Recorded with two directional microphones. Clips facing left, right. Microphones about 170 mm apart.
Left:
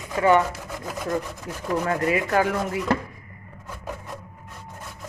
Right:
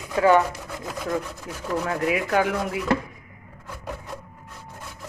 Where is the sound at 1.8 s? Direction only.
Centre (ahead or behind).